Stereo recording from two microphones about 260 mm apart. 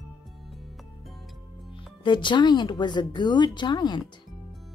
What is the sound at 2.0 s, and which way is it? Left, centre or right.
Speech, centre.